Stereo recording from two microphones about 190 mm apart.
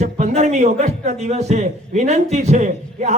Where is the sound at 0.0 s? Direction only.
35° right (ahead or behind).